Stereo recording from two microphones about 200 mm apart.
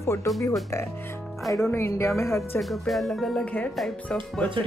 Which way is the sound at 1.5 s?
15° left (ahead or behind).